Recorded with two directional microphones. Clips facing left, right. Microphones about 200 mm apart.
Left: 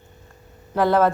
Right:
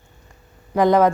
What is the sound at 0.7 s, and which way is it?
Speech, 15° right (ahead or behind).